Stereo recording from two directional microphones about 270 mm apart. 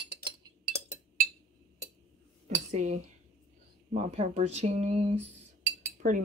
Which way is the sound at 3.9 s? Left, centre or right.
Right.